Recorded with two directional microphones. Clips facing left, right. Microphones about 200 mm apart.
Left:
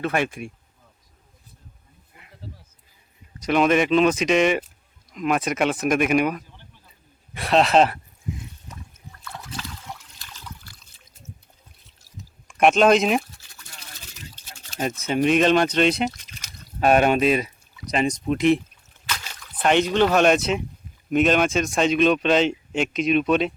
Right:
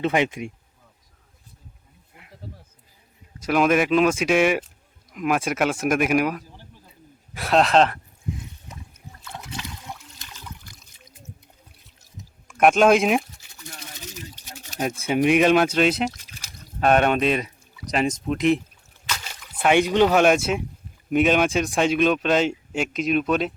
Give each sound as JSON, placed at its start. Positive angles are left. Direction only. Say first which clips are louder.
{"t": 0.0, "sound": "speech", "louder": "right 2 dB", "side_deg": -20}
{"t": 3.4, "sound": "speech", "louder": "left 1 dB", "side_deg": -5}
{"t": 9.2, "sound": "water", "louder": "even", "side_deg": -20}
{"t": 12.1, "sound": "a sound", "louder": "left 1 dB", "side_deg": -45}
{"t": 12.5, "sound": "speech", "louder": "even", "side_deg": -5}
{"t": 14.3, "sound": "speech", "louder": "even", "side_deg": -15}